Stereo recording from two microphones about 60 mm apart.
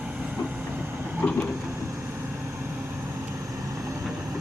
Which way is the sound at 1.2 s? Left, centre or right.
Left.